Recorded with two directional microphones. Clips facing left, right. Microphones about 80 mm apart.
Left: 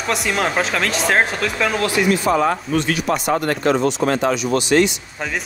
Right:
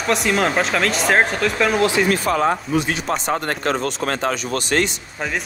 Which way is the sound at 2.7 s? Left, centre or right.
Centre.